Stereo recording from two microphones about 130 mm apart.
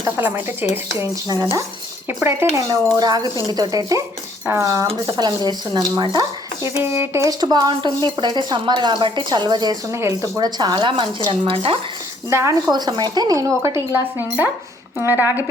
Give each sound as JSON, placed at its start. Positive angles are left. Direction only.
{"t": 0.2, "sound": "speech", "side_deg": -15}
{"t": 12.3, "sound": "speech", "side_deg": -20}